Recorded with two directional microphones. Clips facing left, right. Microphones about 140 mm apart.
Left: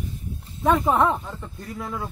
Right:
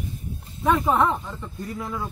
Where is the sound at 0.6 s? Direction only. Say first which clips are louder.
Left 1 dB; 5° left (ahead or behind).